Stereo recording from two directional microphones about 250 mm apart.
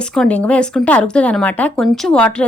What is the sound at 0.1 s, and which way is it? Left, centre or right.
A woman's voice, centre.